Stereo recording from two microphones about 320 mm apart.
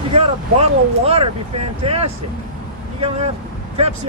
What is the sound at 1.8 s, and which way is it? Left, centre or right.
Speech, centre.